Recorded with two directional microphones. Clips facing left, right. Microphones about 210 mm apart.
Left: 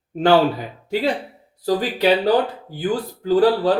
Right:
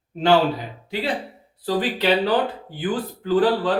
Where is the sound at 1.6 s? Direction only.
40° left (ahead or behind).